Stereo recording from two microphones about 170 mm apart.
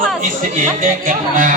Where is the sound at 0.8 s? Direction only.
50° right (ahead or behind).